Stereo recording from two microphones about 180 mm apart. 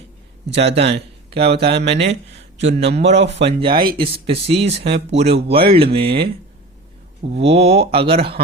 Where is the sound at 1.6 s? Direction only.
35° right (ahead or behind).